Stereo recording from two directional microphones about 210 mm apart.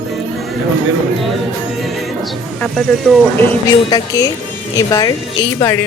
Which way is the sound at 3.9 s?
20° left (ahead or behind).